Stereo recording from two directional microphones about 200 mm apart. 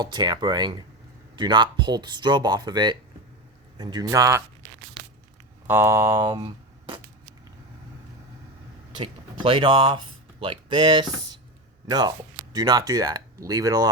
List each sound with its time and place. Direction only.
0.0 s speech: 20° right (ahead or behind)
5.6 s speech: 10° right (ahead or behind)
9.4 s speech: 25° right (ahead or behind)